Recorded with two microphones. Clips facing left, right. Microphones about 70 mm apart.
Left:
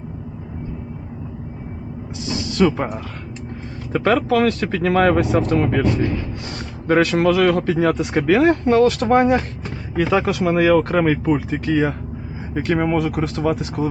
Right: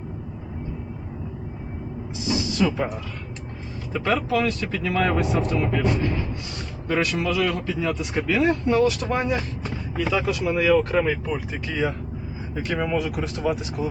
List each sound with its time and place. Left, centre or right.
2.5 s speech: left